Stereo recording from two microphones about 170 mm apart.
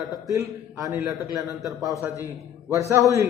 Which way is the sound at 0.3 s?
20° right (ahead or behind).